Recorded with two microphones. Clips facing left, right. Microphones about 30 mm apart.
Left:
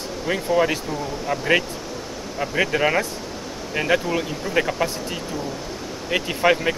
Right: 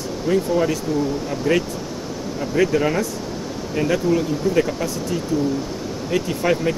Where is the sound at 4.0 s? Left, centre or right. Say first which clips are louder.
Right 5 dB; centre.